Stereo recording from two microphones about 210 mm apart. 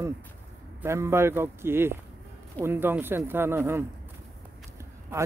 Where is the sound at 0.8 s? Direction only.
15° right (ahead or behind).